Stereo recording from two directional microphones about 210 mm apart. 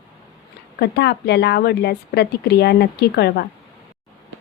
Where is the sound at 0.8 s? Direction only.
50° left (ahead or behind).